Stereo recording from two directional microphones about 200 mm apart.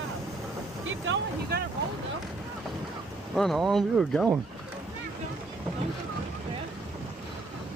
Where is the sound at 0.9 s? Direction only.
70° right (ahead or behind).